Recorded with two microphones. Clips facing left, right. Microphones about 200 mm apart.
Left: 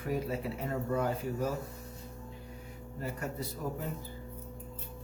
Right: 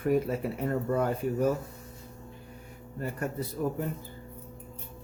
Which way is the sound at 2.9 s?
55° right (ahead or behind).